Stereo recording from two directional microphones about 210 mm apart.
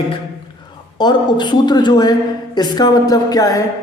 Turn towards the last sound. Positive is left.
turn(degrees=15)  # may be behind; listen again after turning